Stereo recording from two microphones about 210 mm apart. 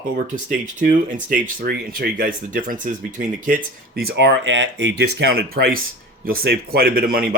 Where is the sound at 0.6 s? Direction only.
40° right (ahead or behind).